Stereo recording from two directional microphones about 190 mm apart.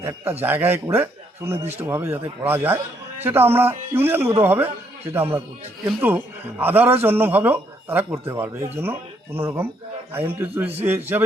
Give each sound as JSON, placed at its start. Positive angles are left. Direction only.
{"t": 0.0, "sound": "a man's voice", "side_deg": -10}